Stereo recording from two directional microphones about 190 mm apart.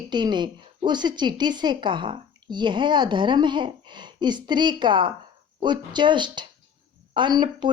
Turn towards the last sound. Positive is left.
turn(degrees=-25)  # may be behind; listen again after turning